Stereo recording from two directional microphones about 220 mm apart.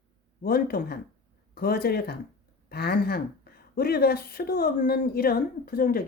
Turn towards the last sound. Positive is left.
turn(degrees=40)  # may be behind; listen again after turning